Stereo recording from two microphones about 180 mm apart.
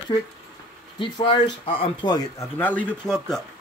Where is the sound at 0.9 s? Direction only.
25° left (ahead or behind).